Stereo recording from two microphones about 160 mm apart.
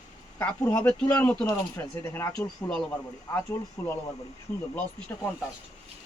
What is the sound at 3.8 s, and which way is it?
Speech, 15° left (ahead or behind).